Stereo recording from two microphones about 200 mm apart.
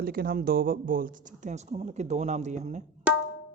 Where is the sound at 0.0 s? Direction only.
50° right (ahead or behind).